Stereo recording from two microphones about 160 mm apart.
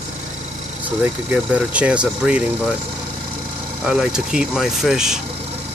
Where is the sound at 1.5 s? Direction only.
10° right (ahead or behind).